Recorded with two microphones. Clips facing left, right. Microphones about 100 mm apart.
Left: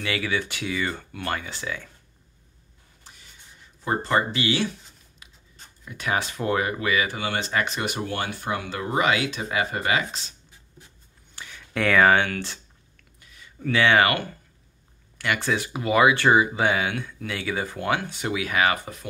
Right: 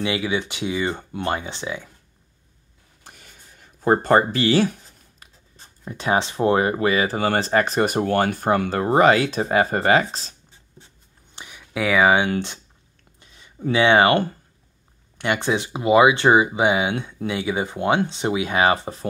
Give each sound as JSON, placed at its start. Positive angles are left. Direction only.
{"t": 0.0, "sound": "speech", "side_deg": -20}
{"t": 3.0, "sound": "writing", "side_deg": -55}
{"t": 3.8, "sound": "speech", "side_deg": -50}
{"t": 5.2, "sound": "writing", "side_deg": -40}
{"t": 5.9, "sound": "speech", "side_deg": -30}
{"t": 11.3, "sound": "a sound", "side_deg": -15}
{"t": 12.3, "sound": "speech", "side_deg": -20}